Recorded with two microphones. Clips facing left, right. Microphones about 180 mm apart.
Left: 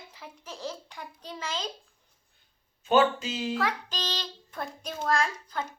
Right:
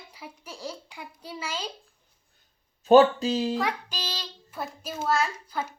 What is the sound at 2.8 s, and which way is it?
Speech, 40° right (ahead or behind).